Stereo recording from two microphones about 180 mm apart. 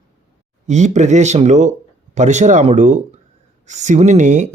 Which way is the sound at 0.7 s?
40° right (ahead or behind).